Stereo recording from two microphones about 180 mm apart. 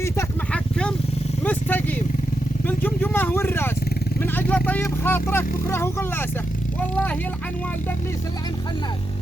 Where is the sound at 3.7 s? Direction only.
60° left (ahead or behind).